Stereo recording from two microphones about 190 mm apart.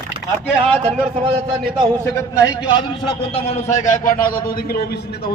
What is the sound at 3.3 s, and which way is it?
A man's voice, 35° left (ahead or behind).